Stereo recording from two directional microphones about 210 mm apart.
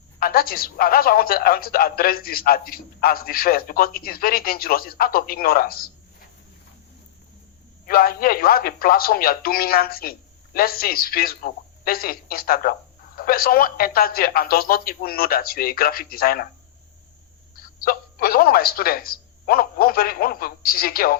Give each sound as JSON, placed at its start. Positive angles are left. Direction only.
{"t": 0.2, "sound": "a woman's voice", "side_deg": 45}
{"t": 7.9, "sound": "a woman's voice", "side_deg": 45}
{"t": 17.5, "sound": "speech", "side_deg": 45}